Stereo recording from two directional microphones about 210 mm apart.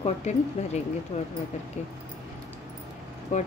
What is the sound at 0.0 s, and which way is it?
Speech, 35° left (ahead or behind).